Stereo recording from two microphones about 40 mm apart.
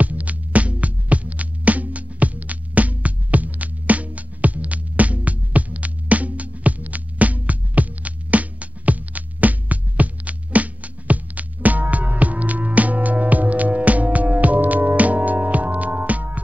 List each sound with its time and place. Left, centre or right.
0.0 s music: right